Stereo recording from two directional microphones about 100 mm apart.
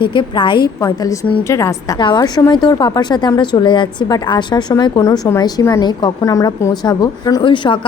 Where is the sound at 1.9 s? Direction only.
45° left (ahead or behind).